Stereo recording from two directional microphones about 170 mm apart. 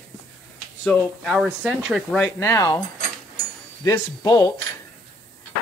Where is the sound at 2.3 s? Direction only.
20° left (ahead or behind).